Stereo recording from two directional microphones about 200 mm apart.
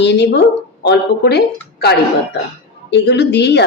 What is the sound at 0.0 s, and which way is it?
A woman's voice, 60° left (ahead or behind).